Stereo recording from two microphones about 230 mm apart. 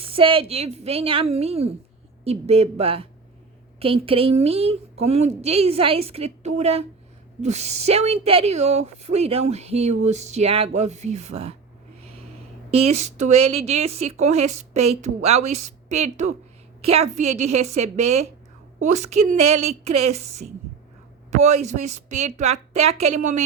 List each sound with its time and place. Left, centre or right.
0.0 s speech: right
12.7 s speech: right